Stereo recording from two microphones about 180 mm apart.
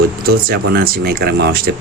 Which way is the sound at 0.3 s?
55° right (ahead or behind).